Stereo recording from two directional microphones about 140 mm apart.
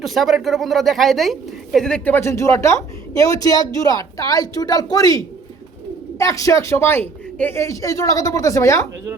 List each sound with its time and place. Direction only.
0.0 s speech: centre (ahead or behind); by 8.9 s 20° left (ahead or behind)